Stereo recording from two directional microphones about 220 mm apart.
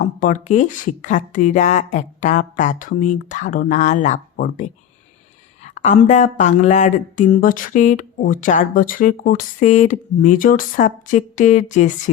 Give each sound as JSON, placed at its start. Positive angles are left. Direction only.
{"t": 0.0, "sound": "speech", "side_deg": 35}